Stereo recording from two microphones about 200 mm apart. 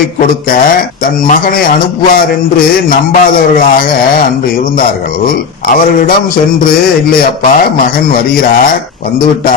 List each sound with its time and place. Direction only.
0.4 s a man's voice: 45° left (ahead or behind)
5.2 s a man's voice: 45° left (ahead or behind)